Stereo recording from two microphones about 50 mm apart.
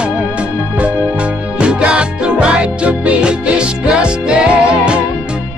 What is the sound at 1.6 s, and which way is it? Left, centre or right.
Music, right.